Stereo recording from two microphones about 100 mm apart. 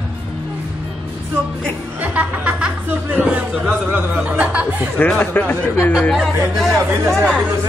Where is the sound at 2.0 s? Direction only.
15° right (ahead or behind).